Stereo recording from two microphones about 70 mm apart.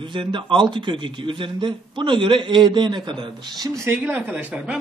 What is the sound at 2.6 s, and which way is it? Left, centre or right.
Speech, right.